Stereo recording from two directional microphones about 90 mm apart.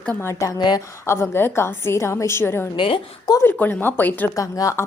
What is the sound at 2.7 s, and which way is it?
Speech, 75° left (ahead or behind).